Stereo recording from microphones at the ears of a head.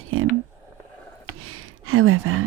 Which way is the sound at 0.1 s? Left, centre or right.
Right.